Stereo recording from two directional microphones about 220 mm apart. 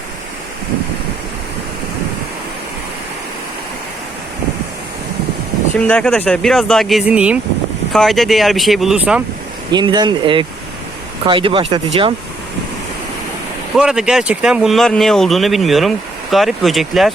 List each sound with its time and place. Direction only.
5.8 s speech: 5° left (ahead or behind)
9.7 s speech: 20° right (ahead or behind)
13.7 s speech: 5° right (ahead or behind)